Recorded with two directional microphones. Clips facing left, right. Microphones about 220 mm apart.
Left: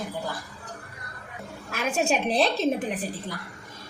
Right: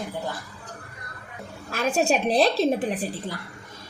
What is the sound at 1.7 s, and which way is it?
Speech, 35° right (ahead or behind).